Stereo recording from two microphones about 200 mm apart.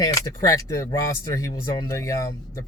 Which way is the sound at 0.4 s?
15° left (ahead or behind).